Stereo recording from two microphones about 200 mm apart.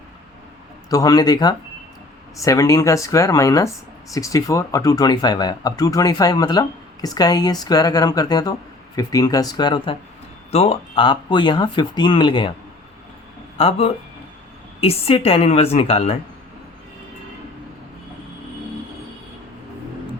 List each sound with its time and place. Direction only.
0.9 s speech: 20° left (ahead or behind)
13.6 s speech: 30° left (ahead or behind)